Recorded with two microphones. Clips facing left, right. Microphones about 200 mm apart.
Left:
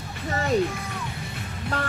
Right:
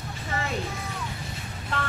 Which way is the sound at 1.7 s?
40° left (ahead or behind).